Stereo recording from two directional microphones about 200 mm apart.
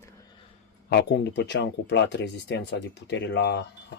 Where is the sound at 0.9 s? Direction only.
60° left (ahead or behind).